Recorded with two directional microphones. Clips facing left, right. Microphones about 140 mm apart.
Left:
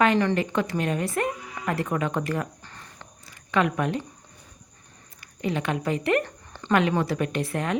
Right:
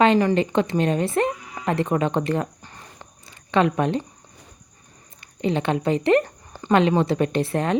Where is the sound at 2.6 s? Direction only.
15° right (ahead or behind).